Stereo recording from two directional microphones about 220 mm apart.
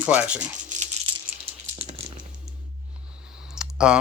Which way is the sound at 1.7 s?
30° right (ahead or behind).